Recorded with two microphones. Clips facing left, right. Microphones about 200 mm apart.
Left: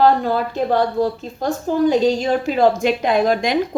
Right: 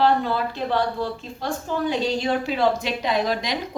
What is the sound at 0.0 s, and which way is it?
A woman's voice, 45° left (ahead or behind).